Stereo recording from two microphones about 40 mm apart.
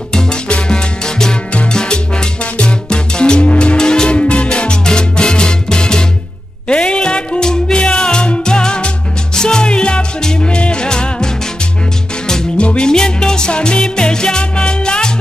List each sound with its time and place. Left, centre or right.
0.1 s salsa music: left
1.7 s music: centre
12.5 s music: left